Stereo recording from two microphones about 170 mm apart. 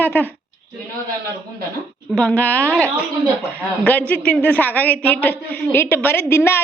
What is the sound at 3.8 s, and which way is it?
A woman's voice, 10° left (ahead or behind).